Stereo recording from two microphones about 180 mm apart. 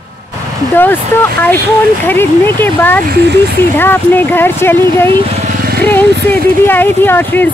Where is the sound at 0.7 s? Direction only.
10° left (ahead or behind).